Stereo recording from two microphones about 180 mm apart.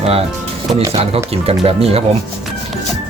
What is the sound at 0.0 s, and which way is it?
Speech, 35° right (ahead or behind).